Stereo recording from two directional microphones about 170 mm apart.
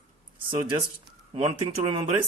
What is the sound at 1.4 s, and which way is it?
Speech, 35° right (ahead or behind).